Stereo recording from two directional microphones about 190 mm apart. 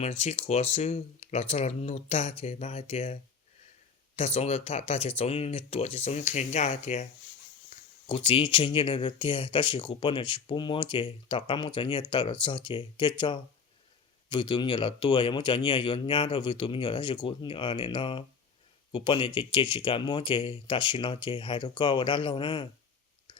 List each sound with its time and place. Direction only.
0.0 s speech: 35° left (ahead or behind)
7.7 s a sound: 35° left (ahead or behind)
8.0 s speech: 25° left (ahead or behind)